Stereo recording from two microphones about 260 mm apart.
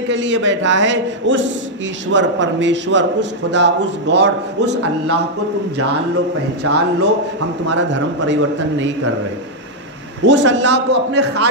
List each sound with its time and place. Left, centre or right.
0.1 s a man's voice: right
6.7 s a man's voice: right
10.2 s a man's voice: right